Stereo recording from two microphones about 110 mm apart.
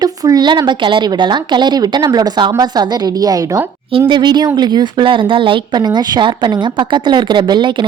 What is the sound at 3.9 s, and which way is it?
Speech, 55° right (ahead or behind).